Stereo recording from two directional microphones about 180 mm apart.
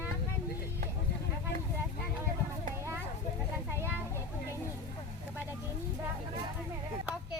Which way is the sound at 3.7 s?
15° right (ahead or behind).